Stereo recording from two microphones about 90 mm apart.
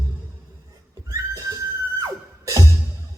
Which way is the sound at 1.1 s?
40° right (ahead or behind).